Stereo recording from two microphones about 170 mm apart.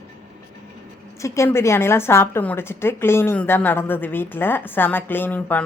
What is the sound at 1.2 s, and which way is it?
A woman's voice, 15° left (ahead or behind).